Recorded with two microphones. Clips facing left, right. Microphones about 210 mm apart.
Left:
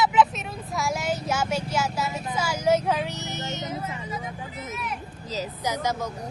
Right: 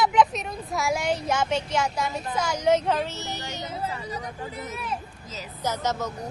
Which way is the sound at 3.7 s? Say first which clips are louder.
Right 1 dB; 35° right (ahead or behind).